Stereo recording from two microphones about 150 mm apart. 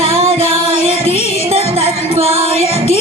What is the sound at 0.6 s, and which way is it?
Music, 40° right (ahead or behind).